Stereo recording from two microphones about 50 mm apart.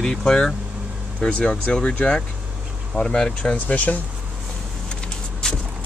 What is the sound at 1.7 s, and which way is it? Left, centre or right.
A man's voice, centre.